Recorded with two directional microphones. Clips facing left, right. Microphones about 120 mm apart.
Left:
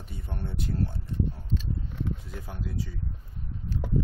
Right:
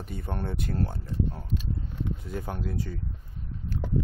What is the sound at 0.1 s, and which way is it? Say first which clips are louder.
Speech: right 4 dB; 60° right (ahead or behind).